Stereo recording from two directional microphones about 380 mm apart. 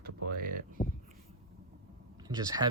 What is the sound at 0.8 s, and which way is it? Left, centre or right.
Speech, left.